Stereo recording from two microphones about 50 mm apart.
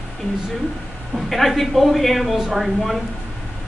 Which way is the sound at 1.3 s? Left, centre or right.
Centre.